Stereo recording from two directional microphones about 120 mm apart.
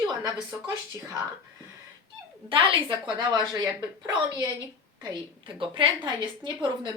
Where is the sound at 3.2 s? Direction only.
30° right (ahead or behind).